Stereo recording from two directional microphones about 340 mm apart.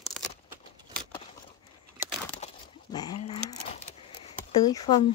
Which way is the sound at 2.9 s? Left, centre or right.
Centre.